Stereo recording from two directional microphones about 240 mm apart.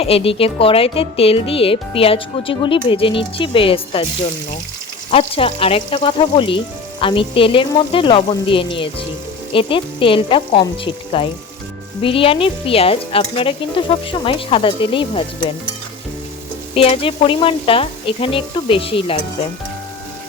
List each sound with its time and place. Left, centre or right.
0.0 s speech: left
5.1 s speech: left
16.7 s speech: left